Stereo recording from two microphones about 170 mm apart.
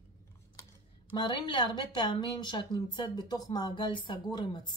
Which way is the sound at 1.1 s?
30° left (ahead or behind).